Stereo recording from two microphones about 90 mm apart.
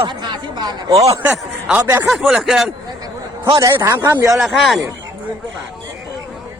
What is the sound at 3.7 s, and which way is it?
Speech, 30° right (ahead or behind).